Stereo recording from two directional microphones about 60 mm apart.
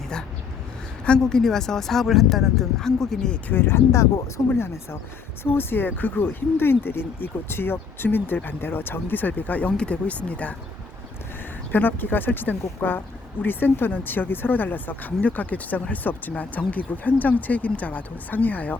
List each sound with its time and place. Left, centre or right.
1.0 s speech: centre
3.5 s speech: left
11.7 s speech: left